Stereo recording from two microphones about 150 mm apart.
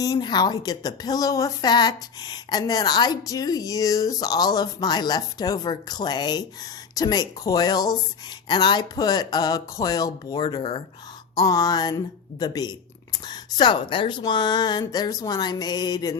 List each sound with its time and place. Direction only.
0.0 s a woman's voice: 25° left (ahead or behind)